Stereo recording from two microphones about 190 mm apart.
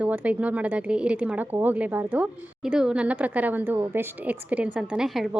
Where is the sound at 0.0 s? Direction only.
5° right (ahead or behind).